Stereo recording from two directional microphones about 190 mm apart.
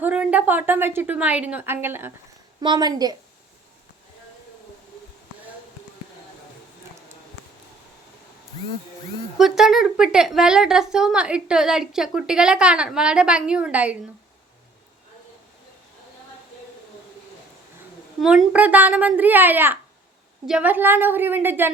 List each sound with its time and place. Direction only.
0.0 s a woman's voice: 10° right (ahead or behind)
9.4 s a woman's voice: centre (ahead or behind)
18.2 s a woman's voice: 5° right (ahead or behind)